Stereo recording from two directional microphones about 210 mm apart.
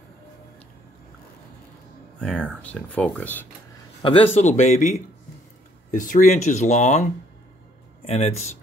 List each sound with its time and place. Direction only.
2.1 s speech: 5° left (ahead or behind)
4.0 s speech: 30° left (ahead or behind)